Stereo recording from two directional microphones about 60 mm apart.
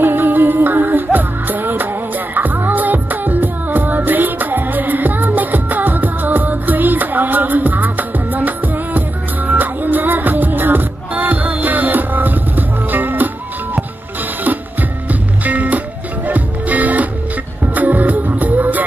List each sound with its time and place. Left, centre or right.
0.0 s music: right
14.4 s music: right